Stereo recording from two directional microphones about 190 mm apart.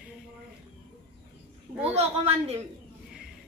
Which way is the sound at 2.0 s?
35° right (ahead or behind).